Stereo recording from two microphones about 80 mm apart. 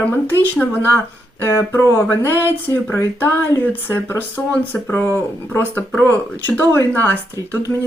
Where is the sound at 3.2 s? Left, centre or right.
Left.